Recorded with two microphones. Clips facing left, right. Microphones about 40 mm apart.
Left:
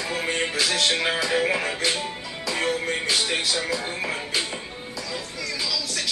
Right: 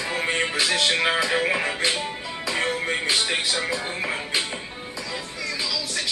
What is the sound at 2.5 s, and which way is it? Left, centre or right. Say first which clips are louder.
Music: even; centre.